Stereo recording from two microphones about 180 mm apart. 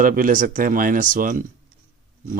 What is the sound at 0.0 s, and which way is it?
Speech, 50° right (ahead or behind).